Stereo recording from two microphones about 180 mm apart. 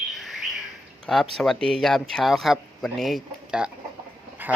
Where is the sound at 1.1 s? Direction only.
Centre (ahead or behind).